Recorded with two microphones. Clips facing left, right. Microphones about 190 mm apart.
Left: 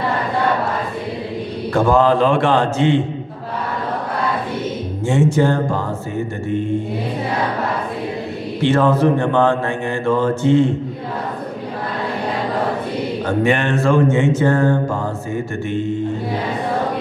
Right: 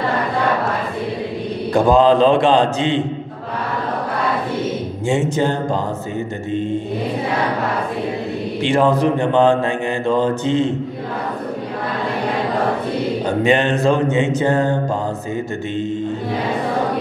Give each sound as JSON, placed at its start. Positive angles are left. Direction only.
{"t": 1.7, "sound": "a man's voice", "side_deg": -15}
{"t": 5.0, "sound": "mantra", "side_deg": -15}
{"t": 8.6, "sound": "a man's voice", "side_deg": -15}
{"t": 10.0, "sound": "mantra", "side_deg": -20}
{"t": 13.4, "sound": "mantra", "side_deg": -20}